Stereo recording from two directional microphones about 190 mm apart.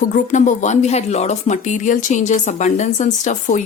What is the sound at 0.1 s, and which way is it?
Speech, 40° left (ahead or behind).